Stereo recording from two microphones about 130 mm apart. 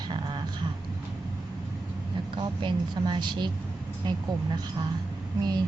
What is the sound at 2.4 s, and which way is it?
Speech, 35° right (ahead or behind).